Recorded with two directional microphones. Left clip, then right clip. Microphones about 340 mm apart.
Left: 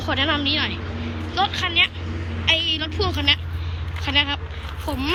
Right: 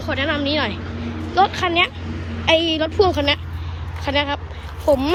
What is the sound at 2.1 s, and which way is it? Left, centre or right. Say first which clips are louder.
Vehicle: right 1 dB; right.